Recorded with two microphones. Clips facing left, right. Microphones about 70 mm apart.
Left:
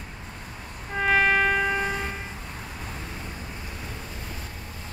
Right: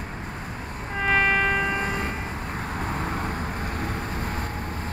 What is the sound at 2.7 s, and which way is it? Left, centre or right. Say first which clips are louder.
Vehicle: right 9 dB; right.